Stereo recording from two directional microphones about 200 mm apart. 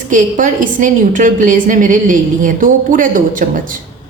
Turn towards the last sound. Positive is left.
turn(degrees=-40)  # may be behind; listen again after turning